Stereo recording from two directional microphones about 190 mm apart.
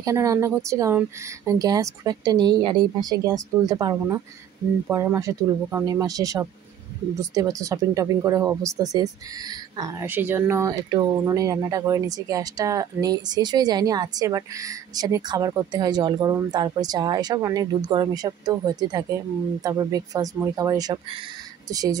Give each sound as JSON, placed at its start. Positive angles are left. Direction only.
{"t": 0.0, "sound": "speech", "side_deg": -20}